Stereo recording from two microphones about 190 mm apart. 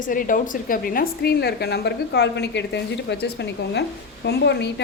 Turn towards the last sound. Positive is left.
turn(degrees=65)  # may be behind; listen again after turning